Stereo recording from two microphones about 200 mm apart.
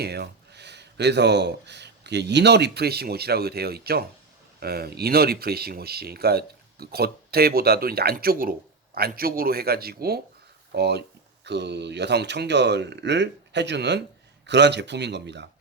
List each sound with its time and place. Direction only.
0.0 s speech: 55° right (ahead or behind)